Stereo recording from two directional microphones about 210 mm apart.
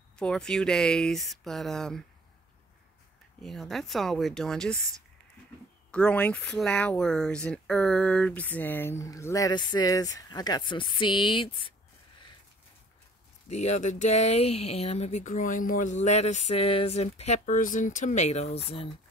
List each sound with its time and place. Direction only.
0.2 s speech: 5° left (ahead or behind)
3.4 s speech: centre (ahead or behind)
5.9 s speech: 5° left (ahead or behind); by 11.7 s 25° left (ahead or behind)
13.5 s speech: 30° left (ahead or behind)